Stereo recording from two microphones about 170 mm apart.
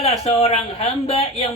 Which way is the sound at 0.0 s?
35° left (ahead or behind).